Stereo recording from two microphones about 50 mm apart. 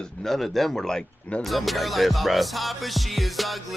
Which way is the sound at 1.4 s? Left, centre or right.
Centre.